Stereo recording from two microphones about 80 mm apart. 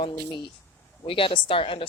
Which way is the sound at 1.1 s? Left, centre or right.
Left.